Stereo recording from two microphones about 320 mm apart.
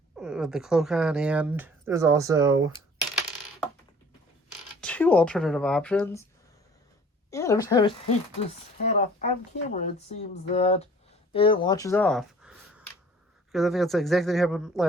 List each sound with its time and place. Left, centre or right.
0.2 s speech: centre
4.8 s speech: centre
7.3 s speech: centre